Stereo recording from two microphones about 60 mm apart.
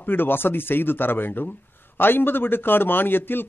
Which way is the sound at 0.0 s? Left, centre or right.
Left.